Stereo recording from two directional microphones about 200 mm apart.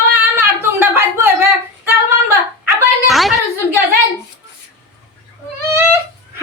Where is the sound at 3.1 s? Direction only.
Centre (ahead or behind).